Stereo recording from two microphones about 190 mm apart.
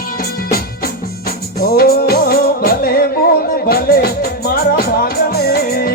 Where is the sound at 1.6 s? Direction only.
50° left (ahead or behind).